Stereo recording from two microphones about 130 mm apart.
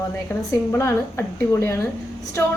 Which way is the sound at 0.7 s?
20° left (ahead or behind).